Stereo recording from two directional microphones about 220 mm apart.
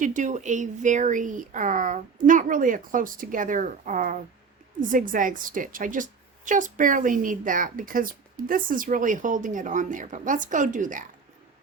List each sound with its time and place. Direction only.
0.0 s a woman's voice: 35° right (ahead or behind)